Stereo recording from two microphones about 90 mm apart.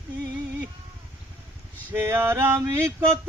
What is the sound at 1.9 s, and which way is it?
Male singing, 25° right (ahead or behind).